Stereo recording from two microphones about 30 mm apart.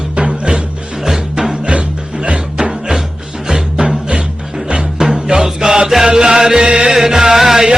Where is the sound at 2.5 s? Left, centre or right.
Right.